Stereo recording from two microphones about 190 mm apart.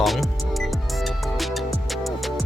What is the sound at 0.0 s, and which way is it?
Music, centre (ahead or behind).